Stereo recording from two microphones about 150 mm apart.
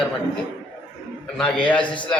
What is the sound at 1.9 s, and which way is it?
Speech, 30° left (ahead or behind).